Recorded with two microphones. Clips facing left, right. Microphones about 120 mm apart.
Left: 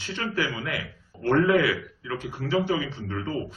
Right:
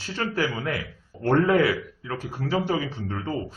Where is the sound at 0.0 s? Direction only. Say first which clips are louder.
Right 2 dB; 35° right (ahead or behind).